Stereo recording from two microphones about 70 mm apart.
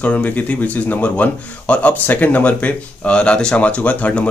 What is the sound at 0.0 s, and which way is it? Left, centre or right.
Speech, left.